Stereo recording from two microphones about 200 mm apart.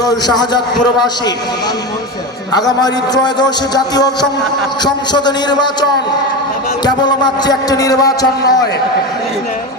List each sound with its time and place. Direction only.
0.0 s a man's voice: 20° left (ahead or behind)
2.5 s a man's voice: 20° left (ahead or behind)